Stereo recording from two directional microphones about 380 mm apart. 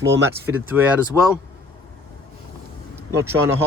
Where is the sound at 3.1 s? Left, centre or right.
Centre.